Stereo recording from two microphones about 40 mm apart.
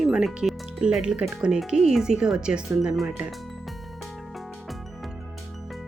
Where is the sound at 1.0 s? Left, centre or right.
Right.